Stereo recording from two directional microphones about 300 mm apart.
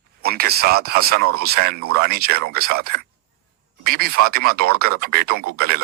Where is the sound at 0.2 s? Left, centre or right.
Right.